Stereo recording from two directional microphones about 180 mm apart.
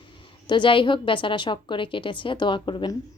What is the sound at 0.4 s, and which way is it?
A woman's voice, 25° left (ahead or behind).